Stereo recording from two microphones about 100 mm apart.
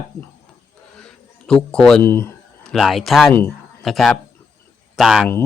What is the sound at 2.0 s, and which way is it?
Speech, 25° left (ahead or behind).